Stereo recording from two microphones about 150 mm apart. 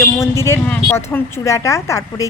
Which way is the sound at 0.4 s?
20° left (ahead or behind).